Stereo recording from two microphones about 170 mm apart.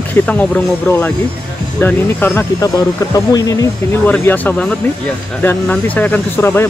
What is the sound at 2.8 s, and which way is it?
Speech, 20° left (ahead or behind).